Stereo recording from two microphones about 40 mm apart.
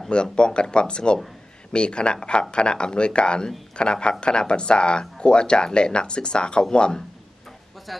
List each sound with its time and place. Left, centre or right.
0.1 s speech: left
7.9 s speech: centre